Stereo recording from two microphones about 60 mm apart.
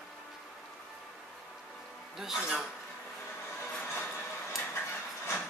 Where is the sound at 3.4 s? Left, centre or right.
Left.